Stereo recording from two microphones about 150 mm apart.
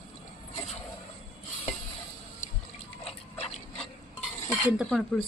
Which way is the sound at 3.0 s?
45° left (ahead or behind).